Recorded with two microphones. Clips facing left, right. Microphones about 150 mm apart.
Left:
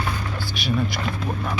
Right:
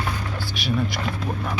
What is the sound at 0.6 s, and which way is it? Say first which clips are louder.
Speech: even; centre (ahead or behind).